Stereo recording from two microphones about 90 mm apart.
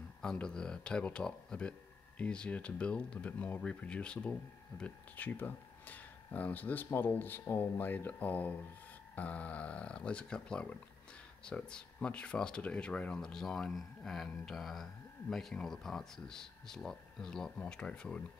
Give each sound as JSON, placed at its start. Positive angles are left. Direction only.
{"t": 0.2, "sound": "speech", "side_deg": 10}